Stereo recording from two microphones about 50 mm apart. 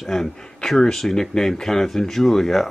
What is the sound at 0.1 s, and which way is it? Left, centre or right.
Speech, centre.